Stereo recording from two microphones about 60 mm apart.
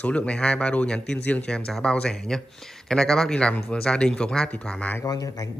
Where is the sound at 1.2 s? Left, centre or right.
Left.